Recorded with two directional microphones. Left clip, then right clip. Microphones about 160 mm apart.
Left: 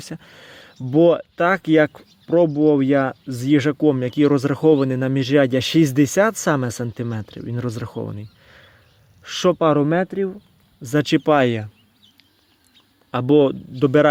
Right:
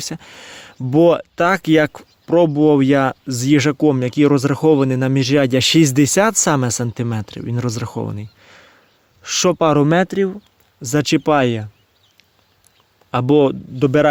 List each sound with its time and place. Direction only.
0.0 s speech: 25° right (ahead or behind); by 10.4 s 45° right (ahead or behind)
10.8 s speech: 20° right (ahead or behind)
13.1 s speech: 20° right (ahead or behind)